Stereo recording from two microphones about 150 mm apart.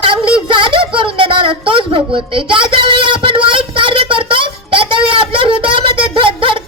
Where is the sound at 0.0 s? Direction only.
35° right (ahead or behind).